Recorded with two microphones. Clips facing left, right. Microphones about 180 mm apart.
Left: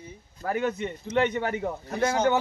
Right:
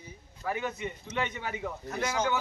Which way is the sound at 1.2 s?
65° left (ahead or behind).